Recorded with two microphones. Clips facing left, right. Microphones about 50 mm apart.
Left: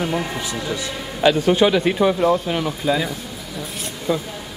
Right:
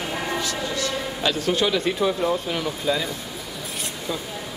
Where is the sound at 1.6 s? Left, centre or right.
Left.